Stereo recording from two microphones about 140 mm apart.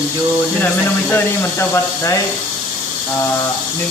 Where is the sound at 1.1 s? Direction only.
20° left (ahead or behind).